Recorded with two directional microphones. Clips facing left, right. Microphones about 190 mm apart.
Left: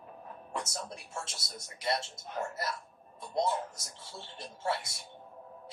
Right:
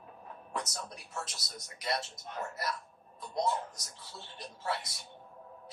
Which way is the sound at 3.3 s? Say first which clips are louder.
Left 1 dB; 25° left (ahead or behind).